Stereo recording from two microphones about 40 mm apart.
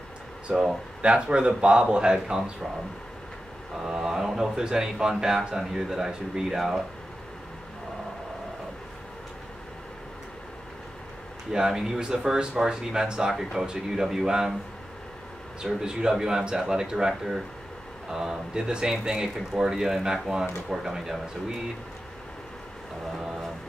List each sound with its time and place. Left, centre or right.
0.5 s speech: centre
1.0 s speech: right
3.8 s speech: centre
11.5 s speech: centre
15.6 s speech: centre